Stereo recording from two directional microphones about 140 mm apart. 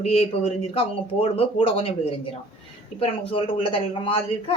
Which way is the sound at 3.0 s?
40° left (ahead or behind).